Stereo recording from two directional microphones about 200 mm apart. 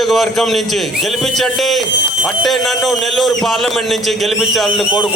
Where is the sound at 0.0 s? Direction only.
Centre (ahead or behind).